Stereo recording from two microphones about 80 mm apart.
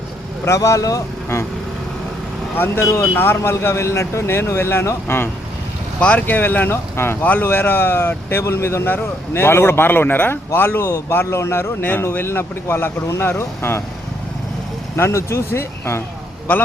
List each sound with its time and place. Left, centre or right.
0.4 s speech: left
2.6 s speech: left
6.0 s speech: centre
14.9 s speech: left